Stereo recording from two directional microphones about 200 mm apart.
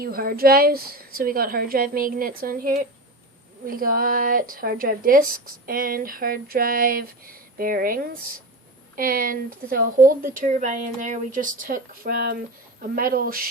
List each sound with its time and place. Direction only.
0.0 s a woman's voice: 50° right (ahead or behind)